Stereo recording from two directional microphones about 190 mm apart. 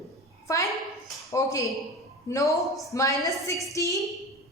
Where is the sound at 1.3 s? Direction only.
15° left (ahead or behind).